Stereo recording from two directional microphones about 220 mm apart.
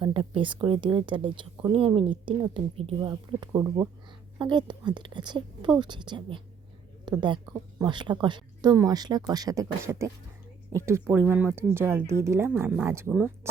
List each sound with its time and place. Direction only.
0.0 s a woman's voice: 25° right (ahead or behind)